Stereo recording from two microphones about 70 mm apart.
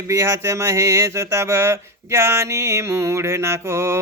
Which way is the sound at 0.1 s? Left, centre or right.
Right.